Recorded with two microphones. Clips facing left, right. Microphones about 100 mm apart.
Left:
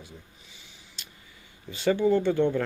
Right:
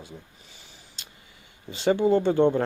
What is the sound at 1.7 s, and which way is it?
Speech, 25° right (ahead or behind).